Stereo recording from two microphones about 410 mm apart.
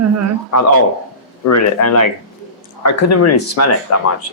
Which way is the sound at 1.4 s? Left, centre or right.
Left.